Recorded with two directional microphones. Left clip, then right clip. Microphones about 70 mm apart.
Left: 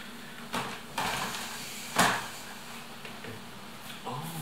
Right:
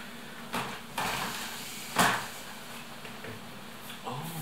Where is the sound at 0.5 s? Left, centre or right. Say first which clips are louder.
Even; centre.